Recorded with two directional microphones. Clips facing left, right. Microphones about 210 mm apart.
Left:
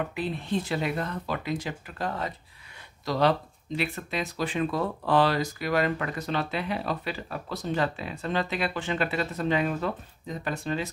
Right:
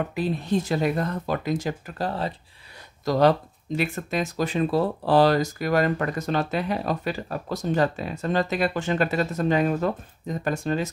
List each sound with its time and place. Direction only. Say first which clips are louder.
0.1 s speech: right 5 dB; 40° right (ahead or behind)
3.1 s speech: right 5 dB; 45° right (ahead or behind)